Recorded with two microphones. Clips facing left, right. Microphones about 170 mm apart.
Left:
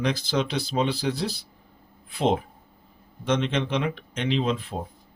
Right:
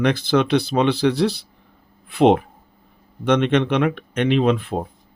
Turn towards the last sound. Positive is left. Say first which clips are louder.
# right 7 dB
turn(degrees=-60)  # may be behind; listen again after turning